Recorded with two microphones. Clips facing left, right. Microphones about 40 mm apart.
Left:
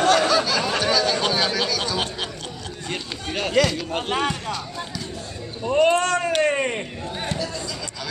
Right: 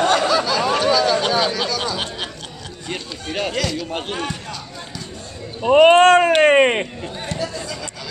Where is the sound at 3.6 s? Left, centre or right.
Centre.